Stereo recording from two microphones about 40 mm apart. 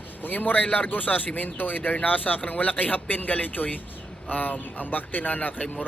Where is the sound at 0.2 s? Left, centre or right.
Left.